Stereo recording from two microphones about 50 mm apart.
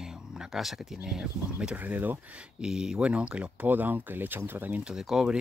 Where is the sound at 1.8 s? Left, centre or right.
Right.